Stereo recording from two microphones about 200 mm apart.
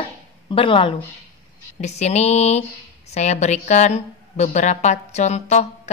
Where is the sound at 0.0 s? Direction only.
25° left (ahead or behind).